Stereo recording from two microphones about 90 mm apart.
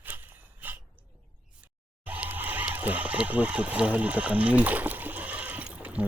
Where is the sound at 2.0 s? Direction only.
20° right (ahead or behind).